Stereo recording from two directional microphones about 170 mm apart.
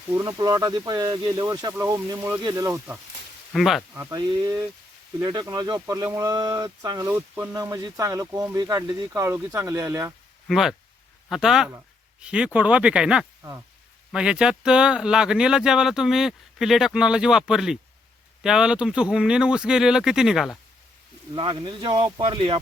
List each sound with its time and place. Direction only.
0.1 s speech: 20° right (ahead or behind)
3.5 s speech: centre (ahead or behind)
3.9 s speech: 20° right (ahead or behind)
10.5 s speech: centre (ahead or behind)
21.3 s speech: 30° right (ahead or behind)